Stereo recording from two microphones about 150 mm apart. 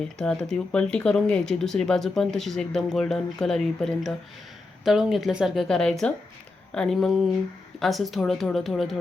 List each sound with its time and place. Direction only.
0.2 s speech: 5° left (ahead or behind)